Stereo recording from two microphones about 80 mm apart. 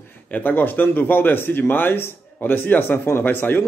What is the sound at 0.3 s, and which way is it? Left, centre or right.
A man's voice, left.